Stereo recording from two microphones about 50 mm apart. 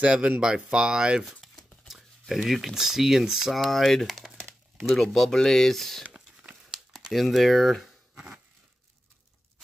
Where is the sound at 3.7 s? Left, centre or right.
Centre.